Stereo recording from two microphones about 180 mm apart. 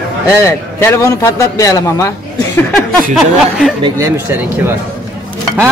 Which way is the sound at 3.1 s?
Centre (ahead or behind).